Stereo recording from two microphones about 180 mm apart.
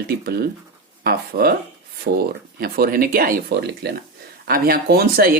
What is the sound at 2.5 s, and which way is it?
Speech, 55° right (ahead or behind).